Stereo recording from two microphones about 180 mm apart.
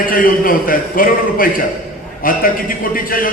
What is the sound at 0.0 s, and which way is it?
A man's voice, 50° left (ahead or behind).